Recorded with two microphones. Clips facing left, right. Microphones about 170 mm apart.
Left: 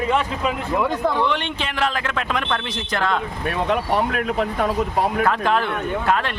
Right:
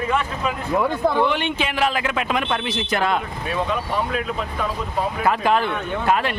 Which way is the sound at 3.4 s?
65° left (ahead or behind).